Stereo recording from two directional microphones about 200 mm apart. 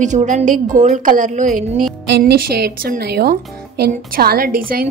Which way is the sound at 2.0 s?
55° right (ahead or behind).